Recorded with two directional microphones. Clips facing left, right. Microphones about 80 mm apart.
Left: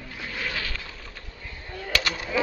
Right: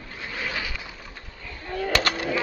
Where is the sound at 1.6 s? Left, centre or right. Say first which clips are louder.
Right 5 dB; right.